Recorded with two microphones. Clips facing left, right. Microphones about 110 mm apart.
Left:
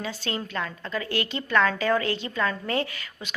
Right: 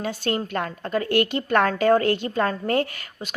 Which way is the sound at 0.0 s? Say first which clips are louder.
Right 6 dB; 50° right (ahead or behind).